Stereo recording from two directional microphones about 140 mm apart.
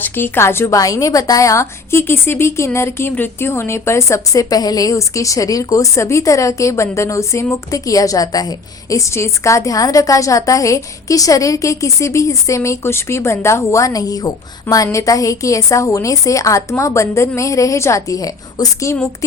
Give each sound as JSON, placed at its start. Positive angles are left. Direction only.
{"t": 0.0, "sound": "a woman's voice", "side_deg": 15}